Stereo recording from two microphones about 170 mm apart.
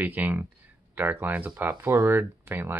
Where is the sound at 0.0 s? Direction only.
10° right (ahead or behind).